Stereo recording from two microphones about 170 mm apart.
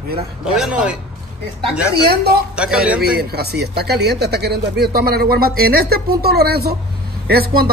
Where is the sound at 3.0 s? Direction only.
65° right (ahead or behind).